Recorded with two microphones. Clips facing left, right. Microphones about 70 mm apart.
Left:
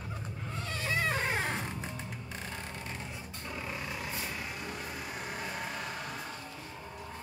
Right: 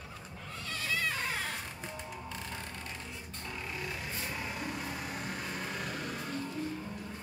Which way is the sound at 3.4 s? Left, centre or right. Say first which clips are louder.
Left 1 dB; centre.